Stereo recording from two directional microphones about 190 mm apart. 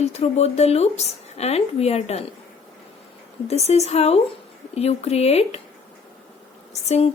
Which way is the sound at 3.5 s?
35° left (ahead or behind).